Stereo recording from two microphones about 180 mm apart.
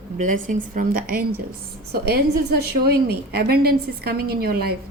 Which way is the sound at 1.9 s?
60° right (ahead or behind).